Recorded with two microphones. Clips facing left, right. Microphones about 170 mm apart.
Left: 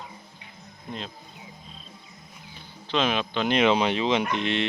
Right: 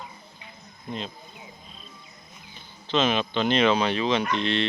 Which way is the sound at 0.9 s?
Centre (ahead or behind).